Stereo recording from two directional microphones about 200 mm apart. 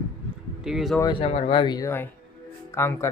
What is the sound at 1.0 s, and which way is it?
Speech, 25° left (ahead or behind).